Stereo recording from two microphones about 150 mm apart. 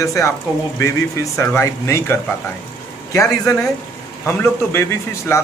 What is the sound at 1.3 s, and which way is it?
A man's voice, 20° left (ahead or behind).